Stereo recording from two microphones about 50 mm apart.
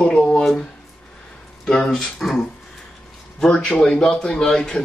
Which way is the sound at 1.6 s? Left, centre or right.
Centre.